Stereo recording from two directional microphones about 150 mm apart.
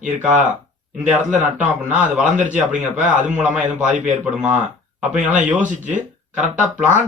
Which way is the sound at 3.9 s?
55° right (ahead or behind).